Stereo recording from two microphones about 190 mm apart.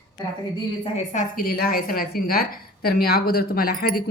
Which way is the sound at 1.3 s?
50° left (ahead or behind).